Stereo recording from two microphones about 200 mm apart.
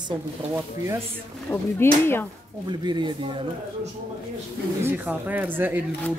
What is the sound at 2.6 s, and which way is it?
Speech, 20° right (ahead or behind).